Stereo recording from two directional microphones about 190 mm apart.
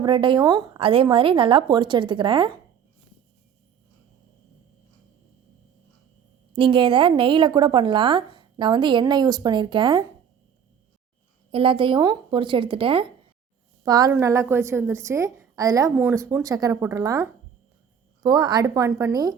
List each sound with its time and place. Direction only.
0.0 s a woman's voice: 25° right (ahead or behind)
6.6 s a woman's voice: 25° right (ahead or behind)
11.5 s a woman's voice: 30° right (ahead or behind)